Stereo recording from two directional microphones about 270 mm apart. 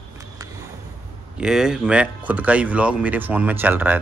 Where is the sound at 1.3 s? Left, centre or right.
Centre.